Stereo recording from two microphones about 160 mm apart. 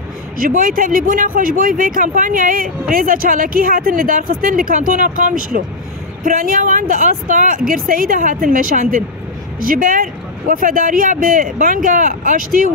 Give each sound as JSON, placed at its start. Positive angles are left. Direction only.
{"t": 0.4, "sound": "speech", "side_deg": -60}